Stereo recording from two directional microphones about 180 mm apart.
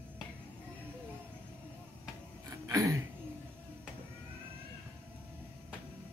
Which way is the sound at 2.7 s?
20° right (ahead or behind).